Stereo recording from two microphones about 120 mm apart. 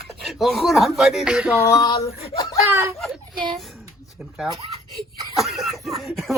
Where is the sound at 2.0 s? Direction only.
55° left (ahead or behind).